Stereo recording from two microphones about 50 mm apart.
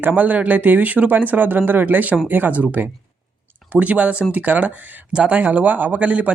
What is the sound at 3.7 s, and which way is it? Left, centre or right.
Speech, right.